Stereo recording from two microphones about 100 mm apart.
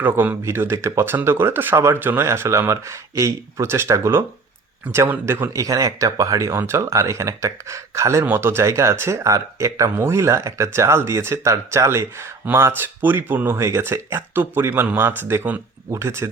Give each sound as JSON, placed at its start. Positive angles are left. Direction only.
{"t": 0.0, "sound": "speech", "side_deg": -15}
{"t": 5.5, "sound": "speech", "side_deg": -35}